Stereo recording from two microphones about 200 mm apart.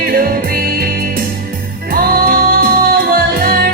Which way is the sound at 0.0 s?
45° right (ahead or behind).